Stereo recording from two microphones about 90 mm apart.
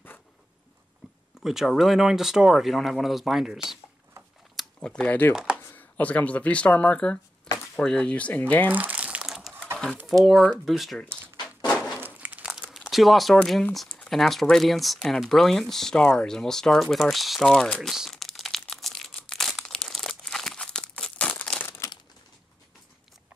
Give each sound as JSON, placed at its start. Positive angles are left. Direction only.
{"t": 1.4, "sound": "speech", "side_deg": -5}
{"t": 5.3, "sound": "speech", "side_deg": -10}
{"t": 5.8, "sound": "speech", "side_deg": 15}
{"t": 8.7, "sound": "crumpling", "side_deg": -15}
{"t": 10.0, "sound": "speech", "side_deg": 0}
{"t": 11.7, "sound": "a sound", "side_deg": 5}
{"t": 12.0, "sound": "crumpling", "side_deg": -15}
{"t": 12.6, "sound": "crumpling", "side_deg": 5}
{"t": 13.9, "sound": "speech", "side_deg": 5}
{"t": 17.9, "sound": "crumpling", "side_deg": 0}
{"t": 21.6, "sound": "crumpling", "side_deg": 30}